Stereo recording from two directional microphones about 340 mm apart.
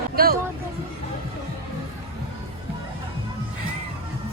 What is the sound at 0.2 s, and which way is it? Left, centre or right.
Vehicle, right.